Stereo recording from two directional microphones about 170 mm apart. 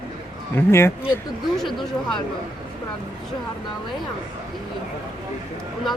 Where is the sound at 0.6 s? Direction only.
15° left (ahead or behind).